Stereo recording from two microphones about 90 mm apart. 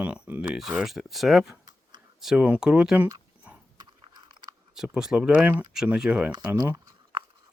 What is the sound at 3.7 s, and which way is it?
Biting, 55° right (ahead or behind).